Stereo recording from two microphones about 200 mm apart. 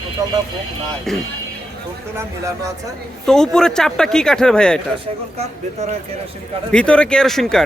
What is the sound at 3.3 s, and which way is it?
Speech, 5° left (ahead or behind).